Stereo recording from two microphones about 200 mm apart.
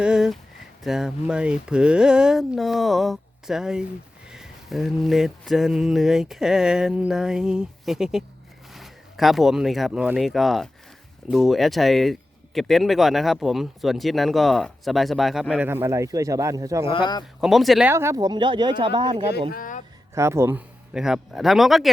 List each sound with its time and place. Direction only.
0.0 s a sound: 5° right (ahead or behind)
0.9 s speech: 5° right (ahead or behind)
16.8 s speech: 25° left (ahead or behind)
17.4 s speech: centre (ahead or behind)
17.9 s speech: 15° right (ahead or behind)
19.5 s speech: 45° left (ahead or behind)
20.1 s speech: 15° right (ahead or behind)